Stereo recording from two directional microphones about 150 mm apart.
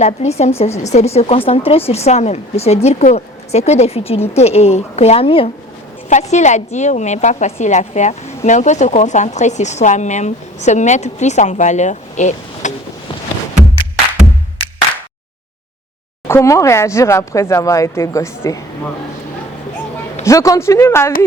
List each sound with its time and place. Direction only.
0.0 s a woman's voice: 50° left (ahead or behind)
6.1 s a woman's voice: 50° left (ahead or behind)
16.2 s speech: 20° left (ahead or behind)
20.2 s speech: 20° left (ahead or behind)